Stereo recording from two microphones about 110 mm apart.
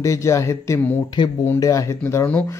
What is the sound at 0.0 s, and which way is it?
Speech, 25° left (ahead or behind).